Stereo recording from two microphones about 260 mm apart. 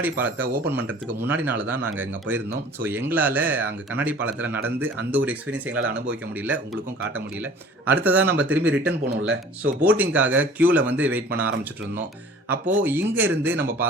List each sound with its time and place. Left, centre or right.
0.0 s speech: centre
3.1 s speech: centre
7.9 s speech: centre
8.9 s speech: right
9.8 s speech: centre